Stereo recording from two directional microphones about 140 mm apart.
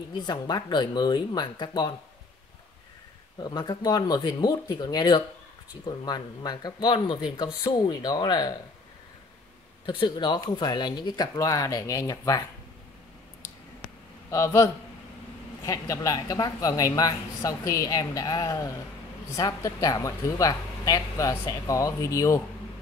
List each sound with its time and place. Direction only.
0.1 s speech: 30° left (ahead or behind)
3.4 s speech: 30° left (ahead or behind)
9.8 s speech: 35° left (ahead or behind)
14.3 s speech: 20° left (ahead or behind)